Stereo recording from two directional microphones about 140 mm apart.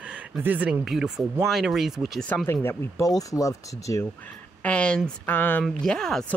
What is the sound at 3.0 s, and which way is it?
Speech, 25° left (ahead or behind).